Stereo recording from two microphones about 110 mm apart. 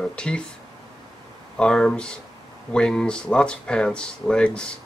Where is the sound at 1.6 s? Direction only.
5° left (ahead or behind).